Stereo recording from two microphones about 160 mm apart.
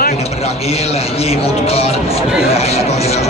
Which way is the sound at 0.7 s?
40° left (ahead or behind).